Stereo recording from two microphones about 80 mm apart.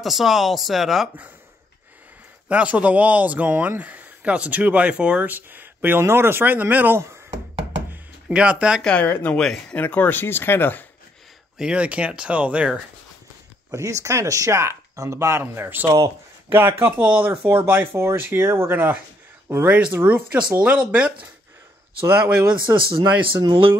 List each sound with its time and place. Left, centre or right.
0.0 s speech: centre
1.0 s speech: centre
2.4 s speech: centre
8.3 s speech: centre
8.8 s speech: centre
9.8 s speech: left
11.5 s speech: centre
13.7 s speech: right
19.7 s speech: centre
22.0 s speech: right
22.8 s speech: right